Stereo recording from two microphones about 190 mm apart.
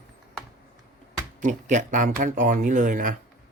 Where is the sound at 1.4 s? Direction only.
40° right (ahead or behind).